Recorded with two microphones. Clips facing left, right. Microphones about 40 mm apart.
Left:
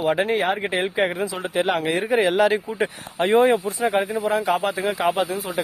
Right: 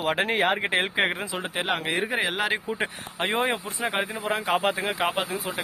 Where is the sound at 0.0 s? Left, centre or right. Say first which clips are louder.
Left 3 dB; right.